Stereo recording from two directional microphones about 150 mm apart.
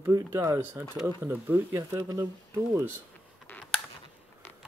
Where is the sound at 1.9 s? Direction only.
25° right (ahead or behind).